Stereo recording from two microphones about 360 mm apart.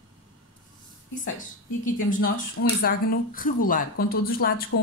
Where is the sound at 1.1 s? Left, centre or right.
Left.